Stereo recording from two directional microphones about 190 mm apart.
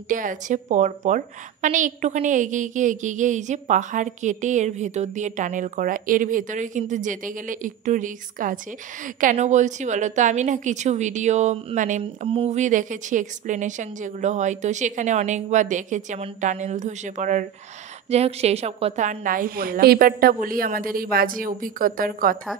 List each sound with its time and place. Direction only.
0.1 s a woman's voice: 45° right (ahead or behind)
12.0 s a woman's voice: 30° right (ahead or behind); by 22.4 s 45° right (ahead or behind)